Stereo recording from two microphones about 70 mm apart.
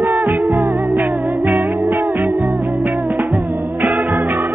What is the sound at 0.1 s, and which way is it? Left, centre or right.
Music, right.